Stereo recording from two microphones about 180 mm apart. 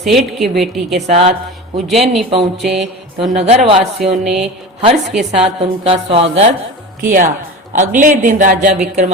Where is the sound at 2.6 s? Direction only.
Centre (ahead or behind).